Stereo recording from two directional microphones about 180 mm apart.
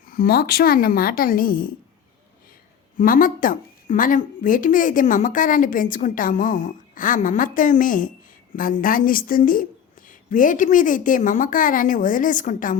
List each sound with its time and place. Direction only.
0.1 s speech: 55° left (ahead or behind)
3.0 s speech: 50° left (ahead or behind)